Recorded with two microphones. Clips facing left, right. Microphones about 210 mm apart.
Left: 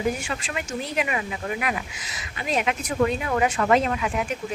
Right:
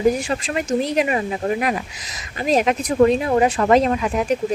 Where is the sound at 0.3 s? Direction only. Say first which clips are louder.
Right 9 dB; 40° right (ahead or behind).